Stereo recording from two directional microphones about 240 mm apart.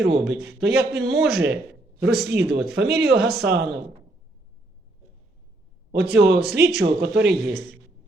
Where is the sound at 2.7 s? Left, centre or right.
Right.